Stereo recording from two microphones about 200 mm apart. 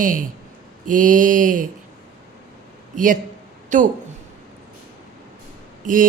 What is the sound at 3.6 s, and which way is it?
Speech, 40° right (ahead or behind).